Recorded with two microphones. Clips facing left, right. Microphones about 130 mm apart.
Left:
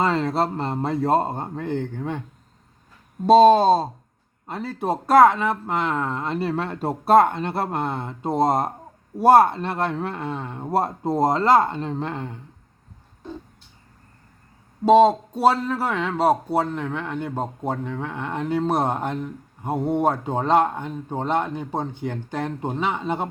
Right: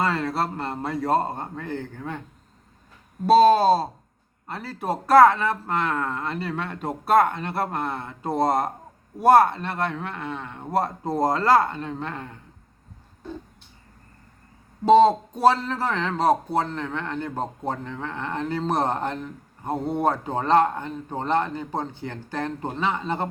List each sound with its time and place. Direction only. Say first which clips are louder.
0.0 s speech: left 3 dB; 20° left (ahead or behind)
3.2 s speech: left 2 dB; 25° left (ahead or behind)
14.8 s a man's voice: left 1 dB; 10° left (ahead or behind)